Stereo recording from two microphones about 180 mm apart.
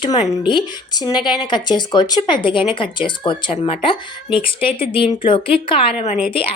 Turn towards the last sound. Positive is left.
turn(degrees=35)  # may be behind; listen again after turning